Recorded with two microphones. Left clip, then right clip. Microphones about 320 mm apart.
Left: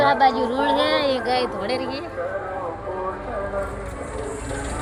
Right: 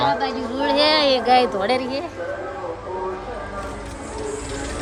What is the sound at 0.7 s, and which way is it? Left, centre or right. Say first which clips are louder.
Speech: right 6 dB; right.